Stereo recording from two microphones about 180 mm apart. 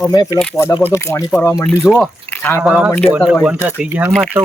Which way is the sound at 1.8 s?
Centre (ahead or behind).